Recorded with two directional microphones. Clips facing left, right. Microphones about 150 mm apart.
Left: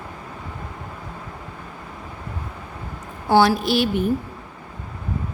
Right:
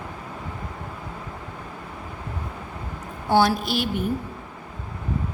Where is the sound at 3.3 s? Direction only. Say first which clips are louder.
Left 3 dB; 90° left.